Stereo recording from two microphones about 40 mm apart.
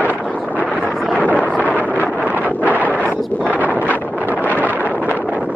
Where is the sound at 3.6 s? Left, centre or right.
Left.